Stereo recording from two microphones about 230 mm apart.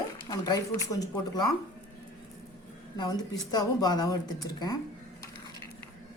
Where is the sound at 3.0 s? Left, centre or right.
Centre.